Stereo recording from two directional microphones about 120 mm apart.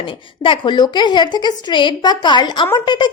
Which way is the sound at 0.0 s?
45° left (ahead or behind).